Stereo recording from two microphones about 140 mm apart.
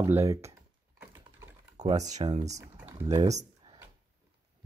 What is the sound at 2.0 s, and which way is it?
Speech, 55° right (ahead or behind).